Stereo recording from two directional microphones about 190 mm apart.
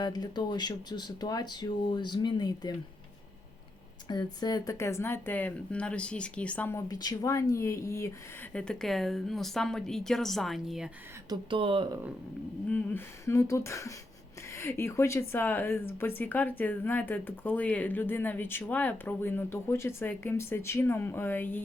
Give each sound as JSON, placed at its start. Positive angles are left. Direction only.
{"t": 0.0, "sound": "speech", "side_deg": 20}
{"t": 4.1, "sound": "speech", "side_deg": 20}
{"t": 8.5, "sound": "a woman's voice", "side_deg": 5}
{"t": 11.3, "sound": "speech", "side_deg": -25}
{"t": 12.6, "sound": "speech", "side_deg": 10}